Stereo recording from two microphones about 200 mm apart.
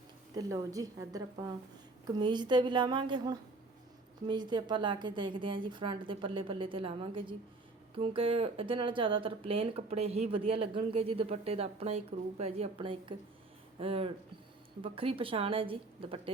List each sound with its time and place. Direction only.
0.3 s a woman's voice: 15° right (ahead or behind)